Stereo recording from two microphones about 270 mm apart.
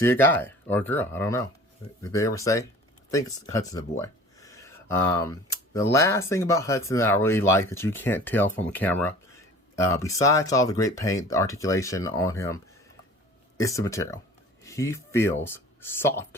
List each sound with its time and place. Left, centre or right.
0.0 s speech: centre
13.6 s speech: centre